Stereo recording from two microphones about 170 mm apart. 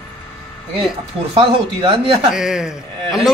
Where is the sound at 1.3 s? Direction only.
30° right (ahead or behind).